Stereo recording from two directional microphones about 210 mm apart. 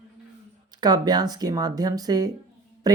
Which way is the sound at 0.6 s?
20° right (ahead or behind).